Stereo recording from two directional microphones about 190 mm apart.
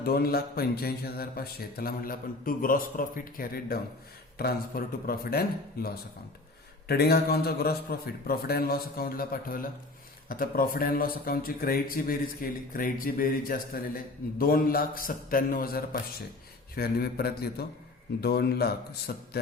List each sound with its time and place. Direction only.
0.0 s a man's voice: 55° left (ahead or behind)
5.0 s a man's voice: 50° left (ahead or behind)